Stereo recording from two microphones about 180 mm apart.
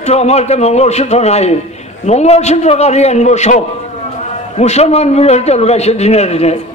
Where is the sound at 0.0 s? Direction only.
35° left (ahead or behind).